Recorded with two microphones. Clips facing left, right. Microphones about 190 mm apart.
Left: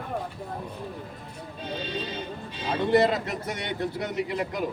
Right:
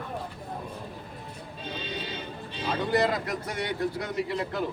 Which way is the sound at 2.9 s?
25° left (ahead or behind).